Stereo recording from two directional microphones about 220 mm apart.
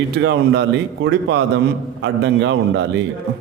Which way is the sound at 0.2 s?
50° right (ahead or behind).